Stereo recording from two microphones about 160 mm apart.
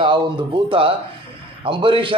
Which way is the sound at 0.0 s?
30° right (ahead or behind).